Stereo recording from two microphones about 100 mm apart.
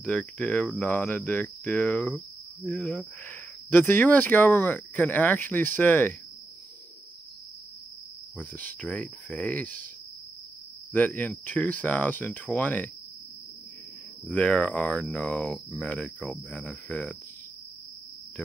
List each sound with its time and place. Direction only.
0.0 s cricket: 15° left (ahead or behind)
3.7 s cricket: 20° left (ahead or behind)
8.4 s cricket: 15° left (ahead or behind)
10.9 s cricket: 15° left (ahead or behind)
14.2 s cricket: 10° left (ahead or behind)